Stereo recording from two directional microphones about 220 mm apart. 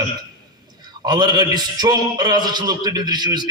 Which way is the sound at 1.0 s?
20° right (ahead or behind).